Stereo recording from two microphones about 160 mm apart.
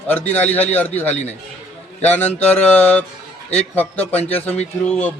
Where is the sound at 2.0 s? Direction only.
10° left (ahead or behind).